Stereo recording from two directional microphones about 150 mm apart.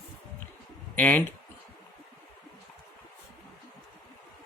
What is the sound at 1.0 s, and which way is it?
Speech, 10° left (ahead or behind).